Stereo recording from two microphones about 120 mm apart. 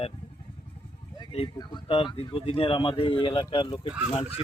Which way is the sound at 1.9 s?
50° left (ahead or behind).